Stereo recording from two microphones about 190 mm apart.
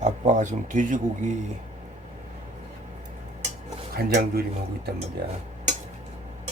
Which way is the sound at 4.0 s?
55° right (ahead or behind).